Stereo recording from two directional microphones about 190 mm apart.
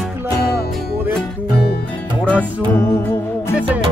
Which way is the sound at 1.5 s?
55° left (ahead or behind).